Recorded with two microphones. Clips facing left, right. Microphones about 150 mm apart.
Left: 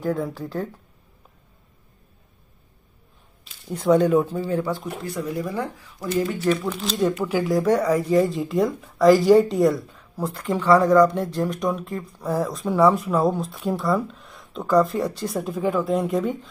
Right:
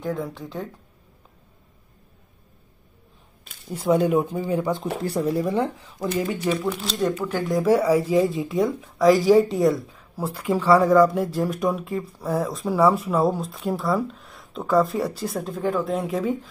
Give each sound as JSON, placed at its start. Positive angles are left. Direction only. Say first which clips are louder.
{"t": 0.0, "sound": "speech", "louder": "left 3 dB", "side_deg": 5}
{"t": 3.5, "sound": "a sound", "louder": "right 3 dB", "side_deg": -50}
{"t": 3.8, "sound": "speech", "louder": "left 2 dB", "side_deg": -10}
{"t": 5.0, "sound": "speech", "louder": "right 5 dB", "side_deg": -30}
{"t": 6.5, "sound": "speech", "louder": "left 1 dB", "side_deg": 0}
{"t": 7.0, "sound": "speech", "louder": "left 4 dB", "side_deg": 10}